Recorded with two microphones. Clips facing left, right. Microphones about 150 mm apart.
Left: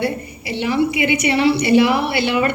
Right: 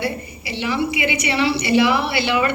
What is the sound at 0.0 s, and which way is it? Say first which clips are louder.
A woman's voice: left 3 dB; 50° left (ahead or behind).